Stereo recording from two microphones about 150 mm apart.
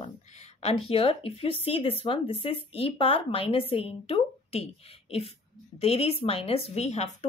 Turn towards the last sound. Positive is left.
turn(degrees=50)  # may be behind; listen again after turning